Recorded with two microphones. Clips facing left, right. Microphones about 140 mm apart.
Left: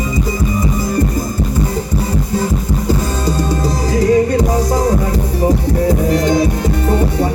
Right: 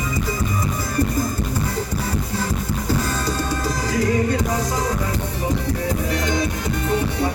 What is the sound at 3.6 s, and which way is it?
Music, 35° left (ahead or behind).